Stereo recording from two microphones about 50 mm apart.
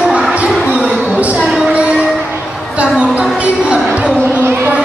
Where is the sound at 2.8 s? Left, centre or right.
Right.